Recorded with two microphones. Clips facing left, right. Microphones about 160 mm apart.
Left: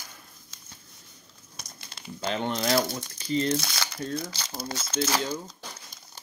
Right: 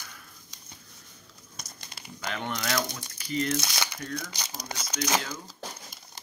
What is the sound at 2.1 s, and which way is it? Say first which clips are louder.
Speech: left 5 dB; 30° left (ahead or behind).